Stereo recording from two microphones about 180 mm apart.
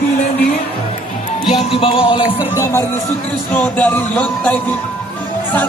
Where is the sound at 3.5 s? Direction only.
10° left (ahead or behind).